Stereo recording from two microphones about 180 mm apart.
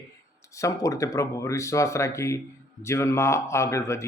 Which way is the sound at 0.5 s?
15° left (ahead or behind).